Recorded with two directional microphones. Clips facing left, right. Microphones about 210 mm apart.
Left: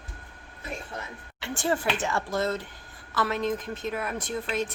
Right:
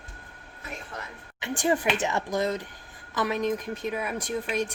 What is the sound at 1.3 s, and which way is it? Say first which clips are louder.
A woman's voice: right 2 dB; 15° right (ahead or behind).